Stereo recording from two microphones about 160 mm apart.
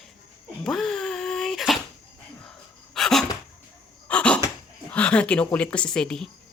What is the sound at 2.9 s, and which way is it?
Sneeze, centre (ahead or behind).